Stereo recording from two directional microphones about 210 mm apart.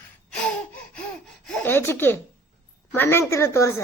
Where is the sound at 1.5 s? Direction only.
10° left (ahead or behind).